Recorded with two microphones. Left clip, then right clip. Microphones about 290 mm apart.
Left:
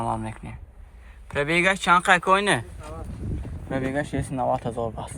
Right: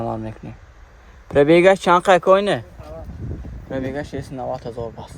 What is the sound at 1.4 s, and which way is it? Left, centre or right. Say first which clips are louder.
Speech: right 9 dB; right.